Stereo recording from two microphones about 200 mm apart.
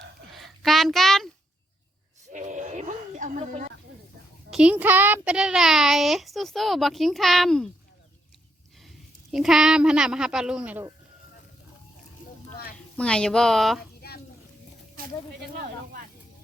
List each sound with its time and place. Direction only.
0.3 s a sound: centre (ahead or behind)
2.3 s music: 40° right (ahead or behind)
4.5 s speech: 5° right (ahead or behind)
9.3 s speech: centre (ahead or behind)
13.0 s speech: 5° left (ahead or behind)